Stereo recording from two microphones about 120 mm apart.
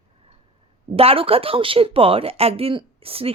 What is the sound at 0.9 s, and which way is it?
Speech, 50° right (ahead or behind).